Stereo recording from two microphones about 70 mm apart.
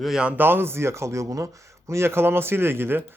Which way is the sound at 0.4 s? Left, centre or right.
Right.